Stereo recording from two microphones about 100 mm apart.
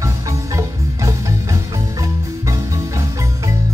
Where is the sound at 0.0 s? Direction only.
30° right (ahead or behind).